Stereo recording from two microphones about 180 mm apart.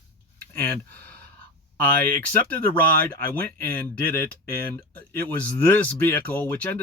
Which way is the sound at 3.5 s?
10° left (ahead or behind).